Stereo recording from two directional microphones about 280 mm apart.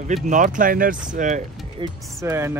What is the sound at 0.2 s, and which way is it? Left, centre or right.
Speech, right.